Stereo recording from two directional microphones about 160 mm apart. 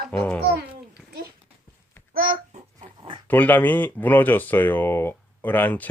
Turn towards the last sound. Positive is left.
turn(degrees=10)  # may be behind; listen again after turning